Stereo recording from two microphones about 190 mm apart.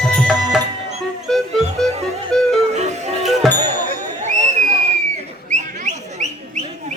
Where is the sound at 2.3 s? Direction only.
5° left (ahead or behind).